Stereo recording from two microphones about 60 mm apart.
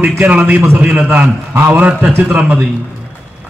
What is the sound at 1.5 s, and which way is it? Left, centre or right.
A man's voice, right.